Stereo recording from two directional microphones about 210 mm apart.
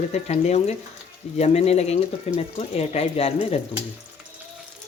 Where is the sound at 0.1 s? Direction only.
30° left (ahead or behind).